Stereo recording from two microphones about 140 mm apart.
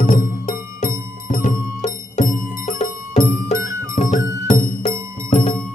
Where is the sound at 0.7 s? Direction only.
70° left (ahead or behind).